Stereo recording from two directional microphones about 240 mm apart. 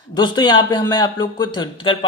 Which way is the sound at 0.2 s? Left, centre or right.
Centre.